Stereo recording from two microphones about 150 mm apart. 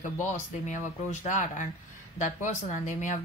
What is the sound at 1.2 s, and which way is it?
Speech, 55° left (ahead or behind).